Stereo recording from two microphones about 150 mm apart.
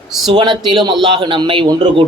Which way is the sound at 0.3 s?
30° right (ahead or behind).